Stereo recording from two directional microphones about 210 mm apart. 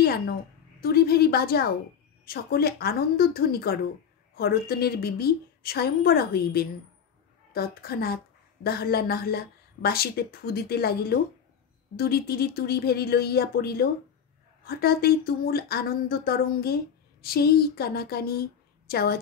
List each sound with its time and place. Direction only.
0.7 s a woman's voice: 45° left (ahead or behind)